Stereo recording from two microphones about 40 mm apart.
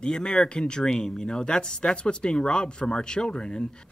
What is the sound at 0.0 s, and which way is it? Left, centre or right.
Speech, left.